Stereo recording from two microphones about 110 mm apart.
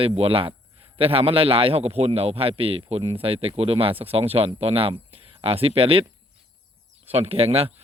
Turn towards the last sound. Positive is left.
turn(degrees=-60)  # may be behind; listen again after turning